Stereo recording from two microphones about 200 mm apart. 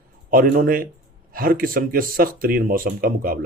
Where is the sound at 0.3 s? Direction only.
45° right (ahead or behind).